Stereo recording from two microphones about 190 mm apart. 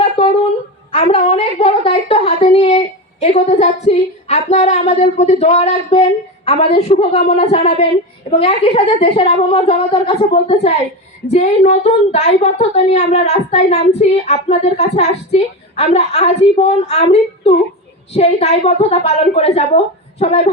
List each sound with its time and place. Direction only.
0.9 s a woman's voice: 35° left (ahead or behind)